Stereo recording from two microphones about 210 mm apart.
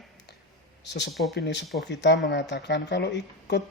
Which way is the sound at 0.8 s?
55° left (ahead or behind).